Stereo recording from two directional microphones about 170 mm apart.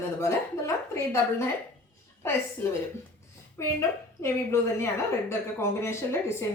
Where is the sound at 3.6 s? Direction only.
15° left (ahead or behind).